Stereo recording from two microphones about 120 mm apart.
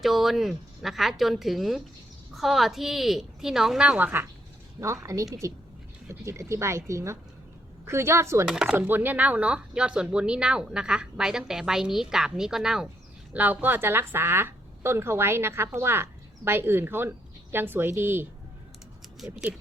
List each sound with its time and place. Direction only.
0.0 s a woman's voice: centre (ahead or behind); by 8.4 s 25° right (ahead or behind)
8.4 s a woman's voice: 5° right (ahead or behind)
19.2 s a woman's voice: 5° right (ahead or behind)